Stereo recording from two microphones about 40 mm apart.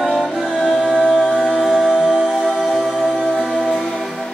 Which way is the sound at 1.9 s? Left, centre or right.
Centre.